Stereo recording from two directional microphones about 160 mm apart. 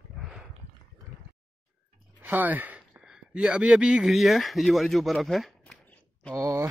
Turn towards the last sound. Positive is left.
turn(degrees=-20)  # may be behind; listen again after turning